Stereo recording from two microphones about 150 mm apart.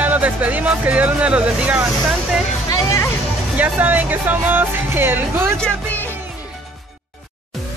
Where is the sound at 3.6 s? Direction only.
10° right (ahead or behind).